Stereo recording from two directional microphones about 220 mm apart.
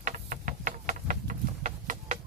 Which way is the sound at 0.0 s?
40° right (ahead or behind).